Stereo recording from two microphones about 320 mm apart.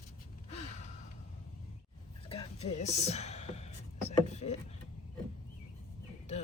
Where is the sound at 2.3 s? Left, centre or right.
Centre.